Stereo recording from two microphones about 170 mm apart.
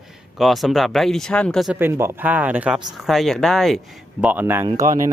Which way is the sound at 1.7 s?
15° right (ahead or behind).